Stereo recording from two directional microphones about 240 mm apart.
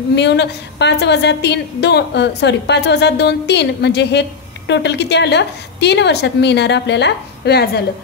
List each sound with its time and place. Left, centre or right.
0.1 s a woman's voice: left